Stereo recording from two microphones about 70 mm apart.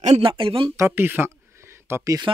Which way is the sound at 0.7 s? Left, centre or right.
Right.